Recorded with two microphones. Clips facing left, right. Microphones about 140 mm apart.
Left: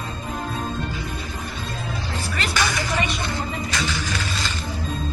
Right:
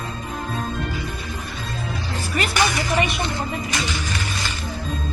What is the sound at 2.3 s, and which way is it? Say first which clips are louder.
Music: right 4 dB; 20° right (ahead or behind).